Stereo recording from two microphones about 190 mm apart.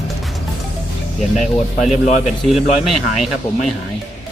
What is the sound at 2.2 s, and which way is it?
Speech, centre (ahead or behind).